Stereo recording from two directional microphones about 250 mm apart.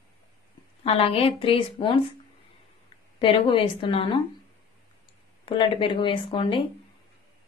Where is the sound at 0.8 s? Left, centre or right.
Left.